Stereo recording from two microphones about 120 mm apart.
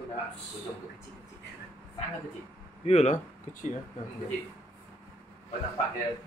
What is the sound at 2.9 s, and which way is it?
Speech, 65° left (ahead or behind).